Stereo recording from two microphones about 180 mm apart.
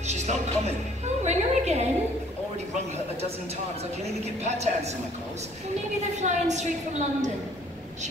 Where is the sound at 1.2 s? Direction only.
40° right (ahead or behind).